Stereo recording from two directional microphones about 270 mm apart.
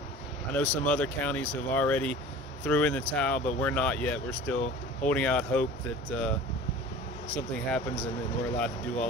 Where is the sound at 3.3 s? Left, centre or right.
Left.